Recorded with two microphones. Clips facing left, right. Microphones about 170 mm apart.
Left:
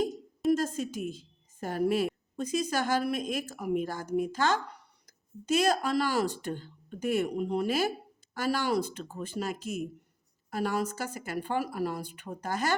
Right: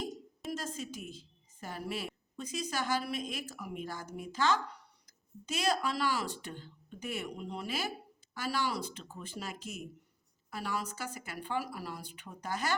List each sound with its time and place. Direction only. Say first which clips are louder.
0.5 s a woman's voice: left 7 dB; 50° left (ahead or behind)